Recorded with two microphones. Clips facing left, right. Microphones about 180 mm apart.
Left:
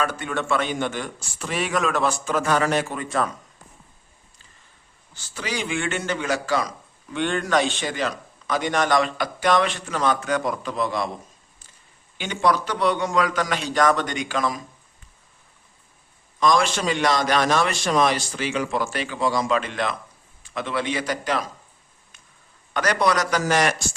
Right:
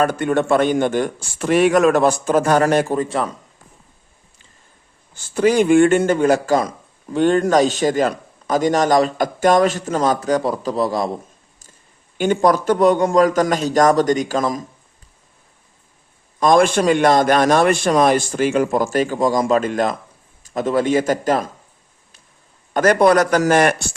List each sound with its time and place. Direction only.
0.0 s a man's voice: 45° right (ahead or behind)
2.8 s a man's voice: 35° right (ahead or behind)
5.1 s a man's voice: 50° right (ahead or behind)
12.1 s a man's voice: 45° right (ahead or behind)
16.4 s a man's voice: 50° right (ahead or behind)
22.7 s a man's voice: 50° right (ahead or behind)